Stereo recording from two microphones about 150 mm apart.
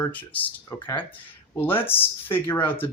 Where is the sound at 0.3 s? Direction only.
10° left (ahead or behind).